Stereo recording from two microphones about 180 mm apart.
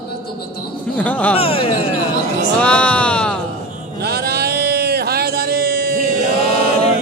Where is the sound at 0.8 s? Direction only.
10° left (ahead or behind).